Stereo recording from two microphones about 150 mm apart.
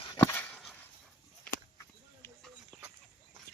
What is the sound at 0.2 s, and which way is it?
Dog, 10° left (ahead or behind).